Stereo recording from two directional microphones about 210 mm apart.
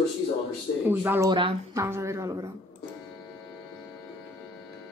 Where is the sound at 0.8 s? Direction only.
10° right (ahead or behind).